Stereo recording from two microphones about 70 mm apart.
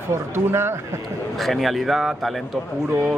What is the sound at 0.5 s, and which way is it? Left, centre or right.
Speech, right.